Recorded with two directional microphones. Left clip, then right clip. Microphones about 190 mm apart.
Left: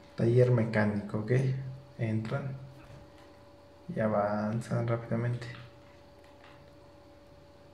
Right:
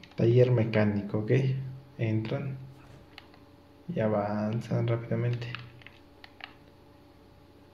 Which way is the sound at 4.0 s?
30° right (ahead or behind).